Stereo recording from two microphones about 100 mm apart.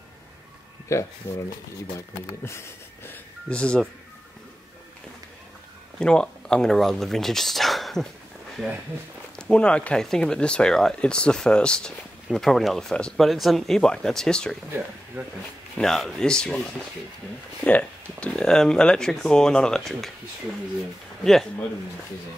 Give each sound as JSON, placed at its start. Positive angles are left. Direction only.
{"t": 0.9, "sound": "speech", "side_deg": 30}
{"t": 3.1, "sound": "speech", "side_deg": 10}
{"t": 5.9, "sound": "speech", "side_deg": 10}
{"t": 9.4, "sound": "speech", "side_deg": 10}
{"t": 15.2, "sound": "speech", "side_deg": -15}
{"t": 15.7, "sound": "speech", "side_deg": 5}
{"t": 17.6, "sound": "speech", "side_deg": 15}
{"t": 21.2, "sound": "speech", "side_deg": 5}